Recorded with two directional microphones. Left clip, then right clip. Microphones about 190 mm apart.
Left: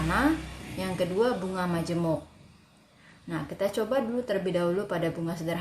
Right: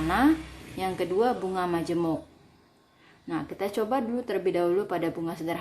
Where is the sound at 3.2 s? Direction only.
40° right (ahead or behind).